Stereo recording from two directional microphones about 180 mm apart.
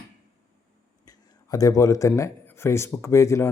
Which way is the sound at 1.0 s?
20° left (ahead or behind).